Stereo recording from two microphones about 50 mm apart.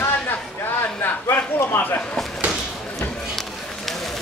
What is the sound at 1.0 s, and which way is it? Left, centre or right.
Speech, left.